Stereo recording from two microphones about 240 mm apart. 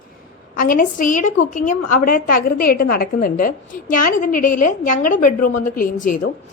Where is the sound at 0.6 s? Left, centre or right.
Left.